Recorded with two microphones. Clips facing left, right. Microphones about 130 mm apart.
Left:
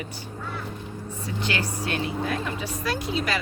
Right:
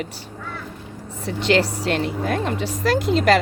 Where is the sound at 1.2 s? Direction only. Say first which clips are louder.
Right 10 dB; 90° right.